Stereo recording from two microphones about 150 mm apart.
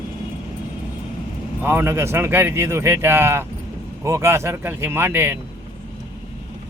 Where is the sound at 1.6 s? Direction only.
15° right (ahead or behind).